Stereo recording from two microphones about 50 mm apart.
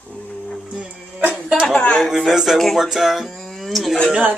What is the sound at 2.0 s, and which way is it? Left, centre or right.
Speech, centre.